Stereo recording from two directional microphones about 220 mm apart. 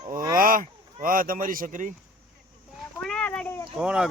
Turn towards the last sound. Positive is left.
turn(degrees=-5)  # may be behind; listen again after turning